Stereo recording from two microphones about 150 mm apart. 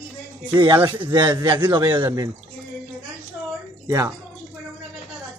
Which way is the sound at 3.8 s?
20° right (ahead or behind).